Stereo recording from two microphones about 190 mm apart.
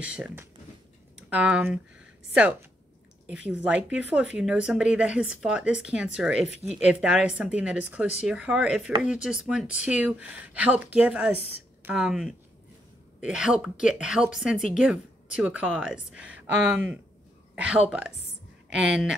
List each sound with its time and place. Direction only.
0.0 s speech: 5° right (ahead or behind)
11.3 s a woman's voice: 30° left (ahead or behind)
11.8 s speech: 5° right (ahead or behind)